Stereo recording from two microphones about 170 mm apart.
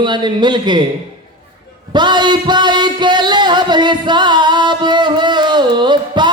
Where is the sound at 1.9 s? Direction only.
25° right (ahead or behind).